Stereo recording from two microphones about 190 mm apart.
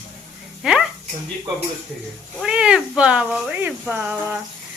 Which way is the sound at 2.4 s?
5° right (ahead or behind).